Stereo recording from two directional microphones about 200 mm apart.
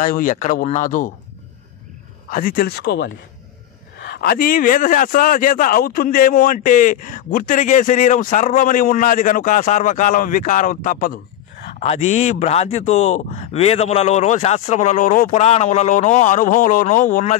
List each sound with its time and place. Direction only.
0.0 s a man's voice: 40° left (ahead or behind)
2.2 s a man's voice: 45° left (ahead or behind)